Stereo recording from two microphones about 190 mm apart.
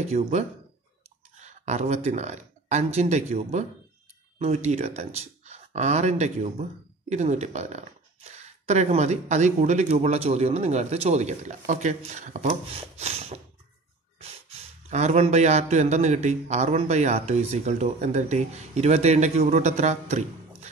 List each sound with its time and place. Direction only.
0.0 s a man's voice: 35° right (ahead or behind)